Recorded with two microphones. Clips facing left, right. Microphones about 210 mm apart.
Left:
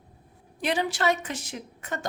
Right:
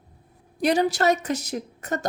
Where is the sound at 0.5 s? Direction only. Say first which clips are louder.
Right 6 dB; 40° right (ahead or behind).